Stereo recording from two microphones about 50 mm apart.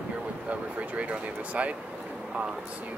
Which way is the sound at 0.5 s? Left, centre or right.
Right.